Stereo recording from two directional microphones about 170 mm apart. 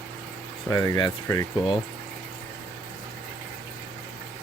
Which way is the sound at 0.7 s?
20° left (ahead or behind).